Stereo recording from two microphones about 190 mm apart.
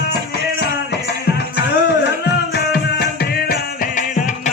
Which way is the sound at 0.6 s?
60° left (ahead or behind).